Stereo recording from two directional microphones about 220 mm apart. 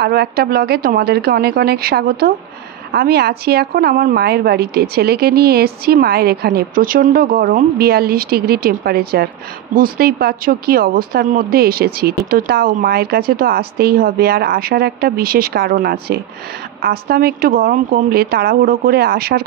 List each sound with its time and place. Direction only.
0.0 s a woman's voice: 45° right (ahead or behind)